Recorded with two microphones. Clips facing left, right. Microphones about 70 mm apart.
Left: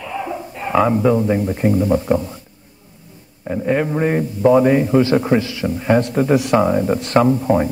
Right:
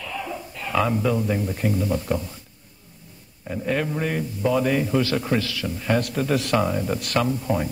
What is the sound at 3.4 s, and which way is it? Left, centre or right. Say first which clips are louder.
A man's voice: left 7 dB; left.